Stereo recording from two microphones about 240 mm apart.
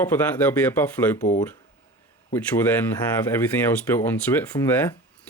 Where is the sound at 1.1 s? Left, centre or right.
Left.